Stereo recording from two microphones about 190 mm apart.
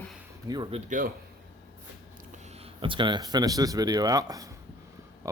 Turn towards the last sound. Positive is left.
turn(degrees=-20)  # may be behind; listen again after turning